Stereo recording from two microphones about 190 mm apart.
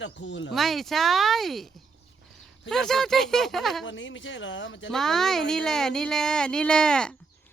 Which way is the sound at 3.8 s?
75° left (ahead or behind).